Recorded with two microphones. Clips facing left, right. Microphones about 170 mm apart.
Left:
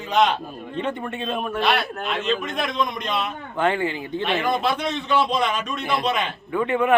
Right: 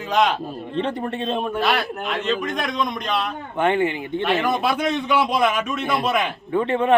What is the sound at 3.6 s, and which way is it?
Speech, 25° right (ahead or behind).